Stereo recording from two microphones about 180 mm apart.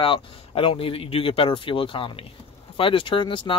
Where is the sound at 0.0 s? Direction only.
30° left (ahead or behind).